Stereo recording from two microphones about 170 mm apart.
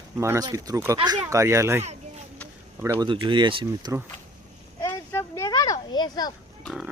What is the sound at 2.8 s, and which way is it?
Speech, 20° right (ahead or behind).